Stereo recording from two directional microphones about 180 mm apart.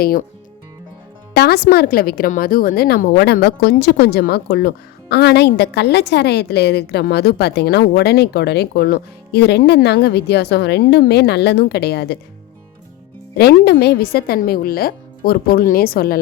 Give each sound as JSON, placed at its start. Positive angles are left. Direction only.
{"t": 0.0, "sound": "speech", "side_deg": 50}
{"t": 1.3, "sound": "a woman's voice", "side_deg": 60}
{"t": 13.3, "sound": "a woman's voice", "side_deg": 60}